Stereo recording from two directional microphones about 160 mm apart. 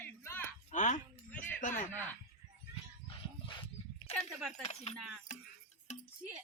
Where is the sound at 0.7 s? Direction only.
50° left (ahead or behind).